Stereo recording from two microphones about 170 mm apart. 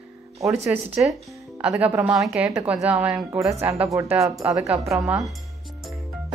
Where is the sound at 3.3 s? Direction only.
20° right (ahead or behind).